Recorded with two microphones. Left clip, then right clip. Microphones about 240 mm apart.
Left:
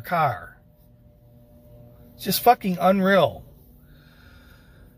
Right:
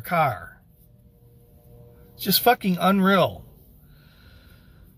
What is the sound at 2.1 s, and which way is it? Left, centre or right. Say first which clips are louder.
Speech: left 1 dB; centre.